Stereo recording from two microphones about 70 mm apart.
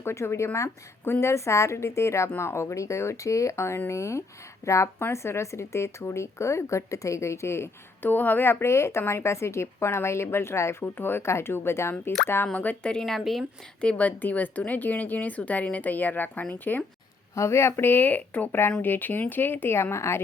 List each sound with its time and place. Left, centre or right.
0.0 s speech: left
12.5 s speech: centre
13.0 s speech: centre
13.8 s speech: left
17.3 s speech: left